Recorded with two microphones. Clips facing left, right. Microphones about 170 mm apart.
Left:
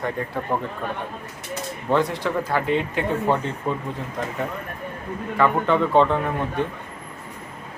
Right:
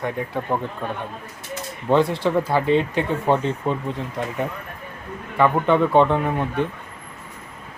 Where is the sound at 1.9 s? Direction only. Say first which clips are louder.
Right 4 dB; 25° right (ahead or behind).